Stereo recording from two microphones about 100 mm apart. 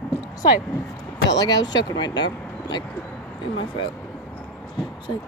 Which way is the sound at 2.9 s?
10° left (ahead or behind).